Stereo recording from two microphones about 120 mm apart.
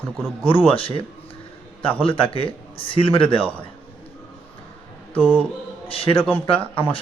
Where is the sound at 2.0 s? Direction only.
50° left (ahead or behind).